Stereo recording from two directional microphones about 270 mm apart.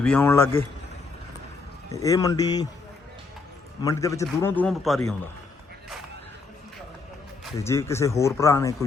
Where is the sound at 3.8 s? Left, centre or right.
Centre.